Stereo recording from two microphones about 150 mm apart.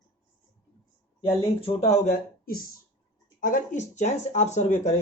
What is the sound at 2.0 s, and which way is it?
Speech, 55° left (ahead or behind).